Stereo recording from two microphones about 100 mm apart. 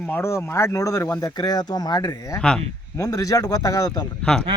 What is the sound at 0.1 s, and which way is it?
A man's voice, 25° left (ahead or behind).